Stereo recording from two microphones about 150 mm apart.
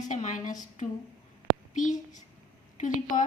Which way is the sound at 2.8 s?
55° left (ahead or behind).